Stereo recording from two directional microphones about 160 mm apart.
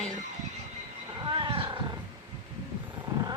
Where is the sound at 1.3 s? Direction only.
35° right (ahead or behind).